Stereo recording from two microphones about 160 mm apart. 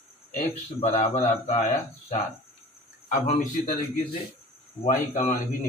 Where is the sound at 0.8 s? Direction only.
45° left (ahead or behind).